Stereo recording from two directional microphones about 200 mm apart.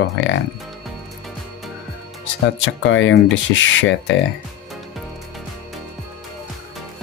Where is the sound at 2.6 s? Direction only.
70° left (ahead or behind).